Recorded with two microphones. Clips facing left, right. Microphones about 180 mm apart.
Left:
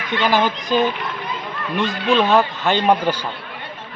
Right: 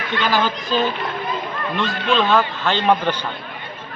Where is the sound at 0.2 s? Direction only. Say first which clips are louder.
Left 2 dB; 15° left (ahead or behind).